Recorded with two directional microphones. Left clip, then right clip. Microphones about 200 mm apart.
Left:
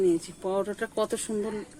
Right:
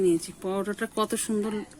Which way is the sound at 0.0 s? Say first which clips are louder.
Right 1 dB; 50° right (ahead or behind).